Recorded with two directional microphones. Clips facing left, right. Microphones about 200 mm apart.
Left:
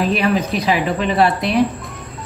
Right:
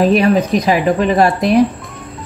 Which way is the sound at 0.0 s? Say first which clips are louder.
Right 6 dB; 45° right (ahead or behind).